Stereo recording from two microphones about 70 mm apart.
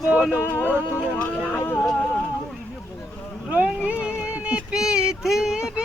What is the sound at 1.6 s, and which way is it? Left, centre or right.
Music, left.